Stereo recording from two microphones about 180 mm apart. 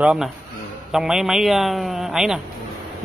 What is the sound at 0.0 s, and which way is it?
A man's voice, 5° right (ahead or behind).